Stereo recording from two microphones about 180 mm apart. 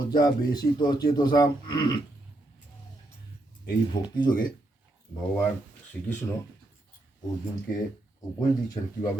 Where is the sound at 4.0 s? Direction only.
25° left (ahead or behind).